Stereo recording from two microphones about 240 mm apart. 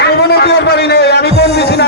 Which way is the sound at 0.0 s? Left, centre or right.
Left.